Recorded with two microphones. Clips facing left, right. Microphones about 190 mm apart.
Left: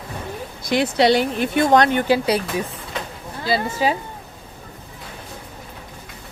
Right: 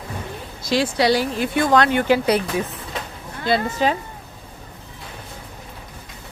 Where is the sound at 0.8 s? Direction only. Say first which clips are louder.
Left 2 dB; 25° left (ahead or behind).